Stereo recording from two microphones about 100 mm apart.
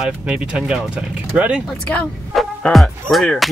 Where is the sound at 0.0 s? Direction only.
10° right (ahead or behind).